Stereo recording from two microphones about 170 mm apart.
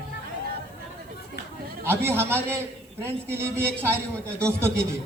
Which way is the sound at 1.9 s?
15° right (ahead or behind).